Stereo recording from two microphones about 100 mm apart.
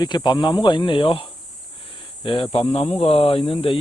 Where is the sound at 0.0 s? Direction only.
45° left (ahead or behind).